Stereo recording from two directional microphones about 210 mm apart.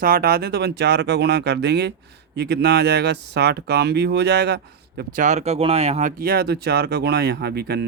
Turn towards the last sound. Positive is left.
turn(degrees=-50)  # may be behind; listen again after turning